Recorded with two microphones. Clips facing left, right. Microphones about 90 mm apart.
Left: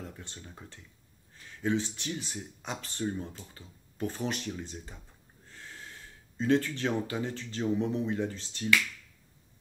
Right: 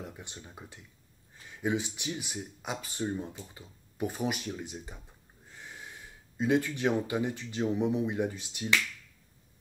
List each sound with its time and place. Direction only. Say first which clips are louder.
0.0 s speech: right 1 dB; 15° right (ahead or behind)